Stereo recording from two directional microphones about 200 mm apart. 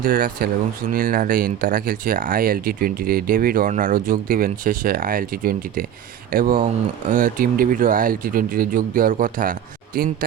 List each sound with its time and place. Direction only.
0.0 s speech: 45° right (ahead or behind)